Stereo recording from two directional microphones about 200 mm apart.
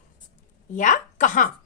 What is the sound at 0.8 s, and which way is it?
Speech, 40° left (ahead or behind).